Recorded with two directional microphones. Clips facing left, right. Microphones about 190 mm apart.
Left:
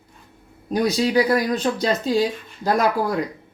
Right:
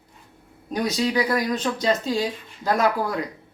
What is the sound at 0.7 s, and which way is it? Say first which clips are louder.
Speech: left 4 dB; 35° left (ahead or behind).